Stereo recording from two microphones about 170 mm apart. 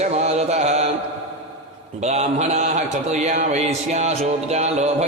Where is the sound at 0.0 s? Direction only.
40° right (ahead or behind).